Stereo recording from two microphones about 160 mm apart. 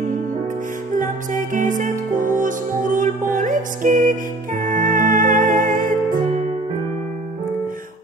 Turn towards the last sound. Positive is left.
turn(degrees=-60)  # may be behind; listen again after turning